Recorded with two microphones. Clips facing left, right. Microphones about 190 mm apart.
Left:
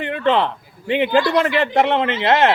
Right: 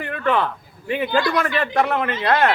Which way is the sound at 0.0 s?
25° left (ahead or behind).